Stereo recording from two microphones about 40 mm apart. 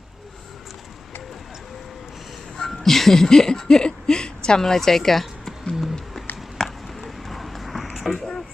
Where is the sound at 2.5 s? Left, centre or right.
Centre.